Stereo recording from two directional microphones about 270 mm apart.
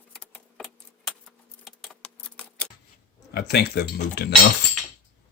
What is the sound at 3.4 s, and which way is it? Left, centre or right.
Speech, left.